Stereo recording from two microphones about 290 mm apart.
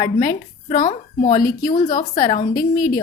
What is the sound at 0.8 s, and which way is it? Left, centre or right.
A woman's voice, left.